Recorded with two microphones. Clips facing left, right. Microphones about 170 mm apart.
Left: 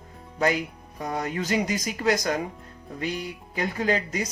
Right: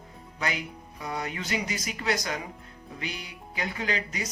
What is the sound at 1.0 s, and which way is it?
Speech, 45° left (ahead or behind).